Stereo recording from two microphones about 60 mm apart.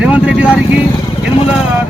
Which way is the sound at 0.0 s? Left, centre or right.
Centre.